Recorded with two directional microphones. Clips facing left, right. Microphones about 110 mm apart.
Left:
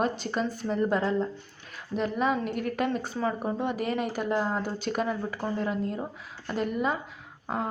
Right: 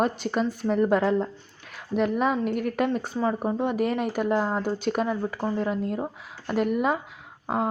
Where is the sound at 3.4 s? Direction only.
Centre (ahead or behind).